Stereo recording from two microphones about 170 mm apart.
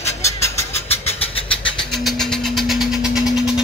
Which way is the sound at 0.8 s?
35° left (ahead or behind).